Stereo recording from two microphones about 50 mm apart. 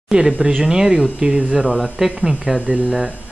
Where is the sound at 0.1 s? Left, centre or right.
Centre.